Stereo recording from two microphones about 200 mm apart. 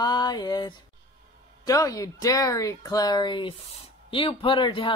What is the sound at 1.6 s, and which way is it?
Speech, 15° left (ahead or behind).